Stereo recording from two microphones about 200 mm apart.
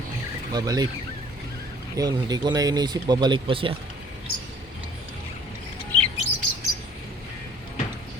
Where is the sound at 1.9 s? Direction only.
20° right (ahead or behind).